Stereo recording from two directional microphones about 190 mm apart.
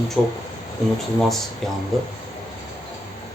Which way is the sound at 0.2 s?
Centre (ahead or behind).